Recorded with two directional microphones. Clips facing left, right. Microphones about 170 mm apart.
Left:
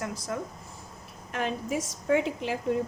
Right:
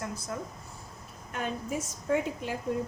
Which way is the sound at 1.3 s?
90° left.